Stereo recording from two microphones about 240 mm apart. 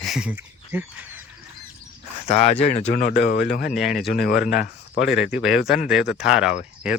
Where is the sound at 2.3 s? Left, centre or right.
Left.